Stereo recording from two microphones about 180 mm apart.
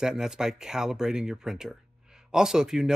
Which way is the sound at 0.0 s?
5° right (ahead or behind).